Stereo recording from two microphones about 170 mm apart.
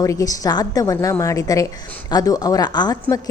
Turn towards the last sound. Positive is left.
turn(degrees=25)  # may be behind; listen again after turning